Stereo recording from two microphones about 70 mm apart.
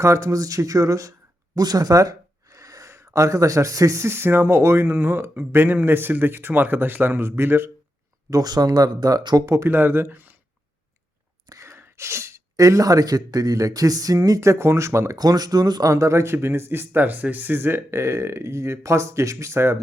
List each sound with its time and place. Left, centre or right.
0.0 s speech: right
1.5 s gasp: right
2.9 s speech: right
8.3 s speech: right
9.6 s speech: right
11.6 s sneeze: right
12.5 s speech: right
15.1 s speech: right
15.9 s speech: right